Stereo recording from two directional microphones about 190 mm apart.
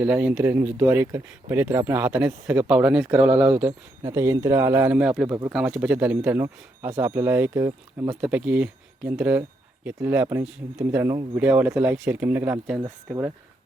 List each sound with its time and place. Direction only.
0.0 s speech: 10° right (ahead or behind)
5.3 s speech: 15° right (ahead or behind)
5.5 s speech: 5° right (ahead or behind)